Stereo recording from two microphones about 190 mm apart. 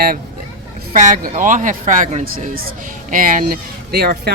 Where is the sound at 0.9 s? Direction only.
45° right (ahead or behind).